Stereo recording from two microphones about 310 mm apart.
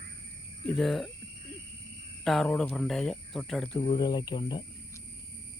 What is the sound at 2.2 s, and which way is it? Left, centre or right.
Speech, centre.